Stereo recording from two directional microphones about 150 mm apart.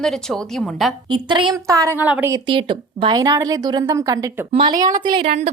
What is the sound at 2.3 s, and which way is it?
A woman's voice, 35° right (ahead or behind).